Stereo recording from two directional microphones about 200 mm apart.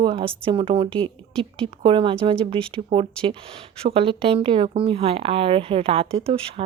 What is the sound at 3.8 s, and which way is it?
Speech, 25° right (ahead or behind).